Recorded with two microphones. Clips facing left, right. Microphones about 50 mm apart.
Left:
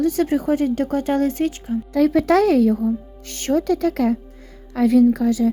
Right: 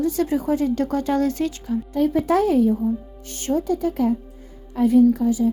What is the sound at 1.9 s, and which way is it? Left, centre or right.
A woman's voice, left.